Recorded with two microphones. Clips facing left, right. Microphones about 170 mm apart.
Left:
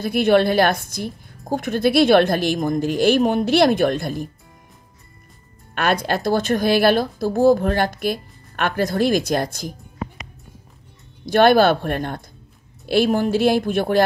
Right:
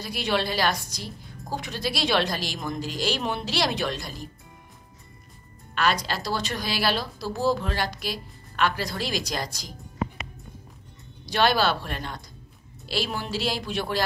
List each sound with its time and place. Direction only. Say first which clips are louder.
0.0 s speech: left 11 dB; 55° left (ahead or behind)
5.8 s speech: left 5 dB; 55° left (ahead or behind)
11.2 s speech: left 9 dB; 55° left (ahead or behind)